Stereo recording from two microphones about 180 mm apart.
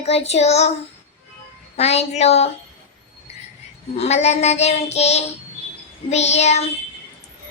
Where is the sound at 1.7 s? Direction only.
35° left (ahead or behind).